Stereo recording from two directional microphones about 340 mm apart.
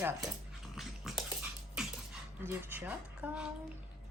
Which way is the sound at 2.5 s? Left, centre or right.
Centre.